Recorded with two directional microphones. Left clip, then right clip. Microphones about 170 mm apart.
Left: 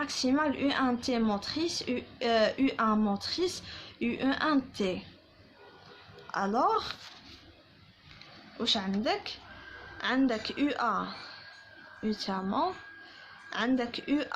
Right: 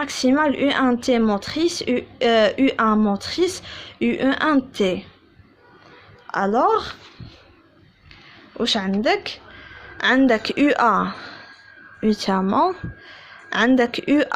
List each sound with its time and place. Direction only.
0.0 s speech: 45° right (ahead or behind)
6.2 s a woman's voice: 45° right (ahead or behind)
8.5 s speech: 45° right (ahead or behind)
13.5 s speech: 50° right (ahead or behind)